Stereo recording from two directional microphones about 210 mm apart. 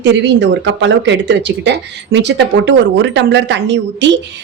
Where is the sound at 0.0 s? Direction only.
55° right (ahead or behind).